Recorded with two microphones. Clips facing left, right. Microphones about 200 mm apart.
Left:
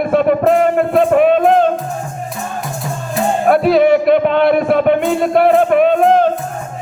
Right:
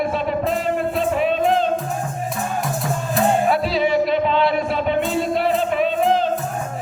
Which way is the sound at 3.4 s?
55° left (ahead or behind).